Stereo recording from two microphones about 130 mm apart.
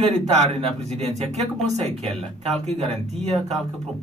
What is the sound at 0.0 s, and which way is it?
Speech, 60° right (ahead or behind).